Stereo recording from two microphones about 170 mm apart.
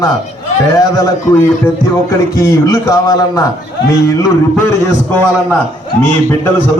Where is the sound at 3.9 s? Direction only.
20° left (ahead or behind).